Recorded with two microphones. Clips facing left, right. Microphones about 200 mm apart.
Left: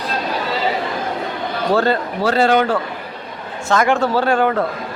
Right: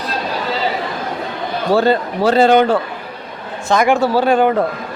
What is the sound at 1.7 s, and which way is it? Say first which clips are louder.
A man's voice: right 3 dB; 15° right (ahead or behind).